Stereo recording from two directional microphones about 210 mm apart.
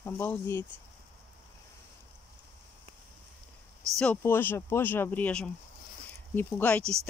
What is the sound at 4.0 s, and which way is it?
Speech, 10° left (ahead or behind).